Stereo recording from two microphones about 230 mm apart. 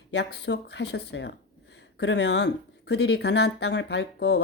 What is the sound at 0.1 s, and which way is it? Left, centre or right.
Speech, left.